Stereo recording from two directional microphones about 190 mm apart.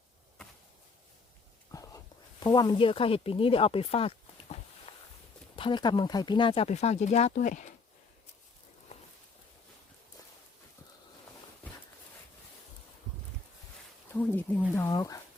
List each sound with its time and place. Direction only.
1.7 s whispering: 15° left (ahead or behind)
2.4 s speech: 20° left (ahead or behind)
4.9 s walk: 30° left (ahead or behind)
5.5 s speech: 25° left (ahead or behind); by 7.6 s 40° left (ahead or behind)
14.1 s a sound: 10° left (ahead or behind)